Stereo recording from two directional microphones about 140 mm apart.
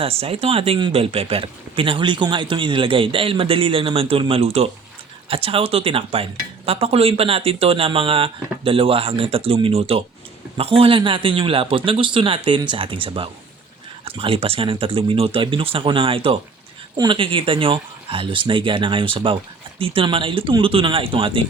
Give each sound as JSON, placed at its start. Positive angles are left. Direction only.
{"t": 0.0, "sound": "speech", "side_deg": -45}